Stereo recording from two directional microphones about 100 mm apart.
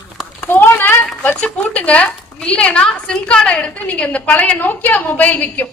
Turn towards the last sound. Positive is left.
turn(degrees=15)  # may be behind; listen again after turning